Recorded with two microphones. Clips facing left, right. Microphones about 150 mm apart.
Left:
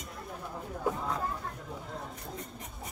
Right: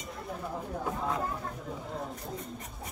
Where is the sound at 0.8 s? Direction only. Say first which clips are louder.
Left 1 dB; 5° right (ahead or behind).